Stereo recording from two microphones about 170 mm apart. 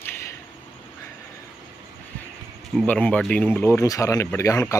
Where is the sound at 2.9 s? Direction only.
10° left (ahead or behind).